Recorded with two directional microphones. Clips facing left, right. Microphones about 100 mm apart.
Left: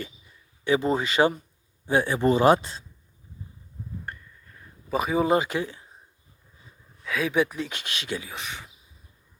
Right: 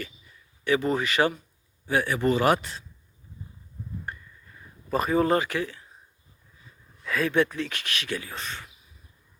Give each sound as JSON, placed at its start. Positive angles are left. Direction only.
{"t": 0.6, "sound": "speech", "side_deg": 20}
{"t": 4.0, "sound": "a sound", "side_deg": -5}
{"t": 7.0, "sound": "speech", "side_deg": 0}